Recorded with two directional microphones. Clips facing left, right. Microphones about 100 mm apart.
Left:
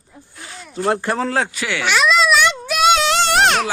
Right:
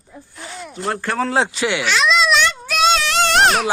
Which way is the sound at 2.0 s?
5° left (ahead or behind).